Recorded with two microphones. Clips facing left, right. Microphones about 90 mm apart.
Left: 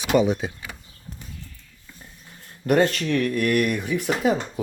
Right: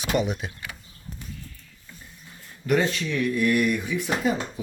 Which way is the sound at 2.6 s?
55° left (ahead or behind).